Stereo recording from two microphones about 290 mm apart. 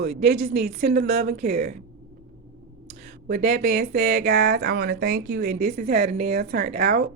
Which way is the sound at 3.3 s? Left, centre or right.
Right.